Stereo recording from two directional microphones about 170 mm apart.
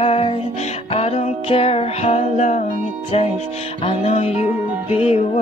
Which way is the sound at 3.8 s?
35° left (ahead or behind).